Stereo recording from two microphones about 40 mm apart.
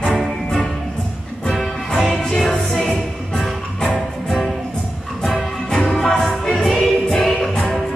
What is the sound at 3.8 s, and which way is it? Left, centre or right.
Music, centre.